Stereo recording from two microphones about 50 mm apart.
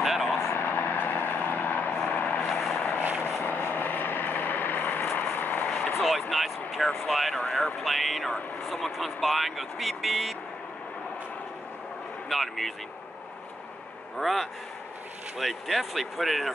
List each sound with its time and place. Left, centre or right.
0.0 s vehicle: centre
0.4 s vehicle: left
2.4 s vehicle: centre
3.2 s vehicle: left
5.9 s vehicle: centre
6.3 s speech: centre
7.8 s speech: centre
12.3 s speech: centre
14.1 s speech: centre